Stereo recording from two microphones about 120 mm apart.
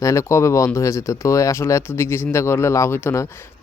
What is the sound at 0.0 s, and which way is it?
Speech, 25° left (ahead or behind).